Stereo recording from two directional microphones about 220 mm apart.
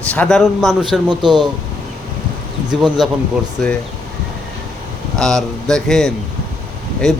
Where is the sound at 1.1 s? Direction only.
20° right (ahead or behind).